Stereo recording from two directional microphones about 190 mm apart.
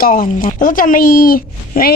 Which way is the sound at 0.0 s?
45° left (ahead or behind).